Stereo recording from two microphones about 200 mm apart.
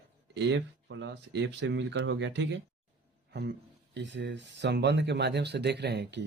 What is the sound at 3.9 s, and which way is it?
Speech, 60° right (ahead or behind).